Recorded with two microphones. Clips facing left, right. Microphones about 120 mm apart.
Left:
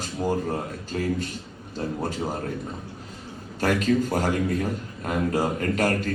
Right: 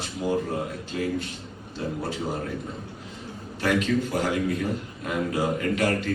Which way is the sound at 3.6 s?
40° left (ahead or behind).